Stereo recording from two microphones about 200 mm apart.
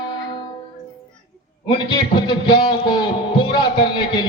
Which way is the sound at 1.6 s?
20° left (ahead or behind).